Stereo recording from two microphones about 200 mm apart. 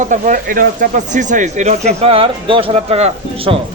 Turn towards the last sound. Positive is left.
turn(degrees=-30)  # may be behind; listen again after turning